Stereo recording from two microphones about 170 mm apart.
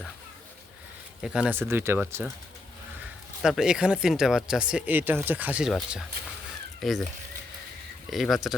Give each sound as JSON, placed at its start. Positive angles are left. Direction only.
{"t": 1.2, "sound": "speech", "side_deg": -5}
{"t": 1.5, "sound": "speech", "side_deg": -15}
{"t": 3.4, "sound": "speech", "side_deg": -5}
{"t": 8.1, "sound": "speech", "side_deg": 0}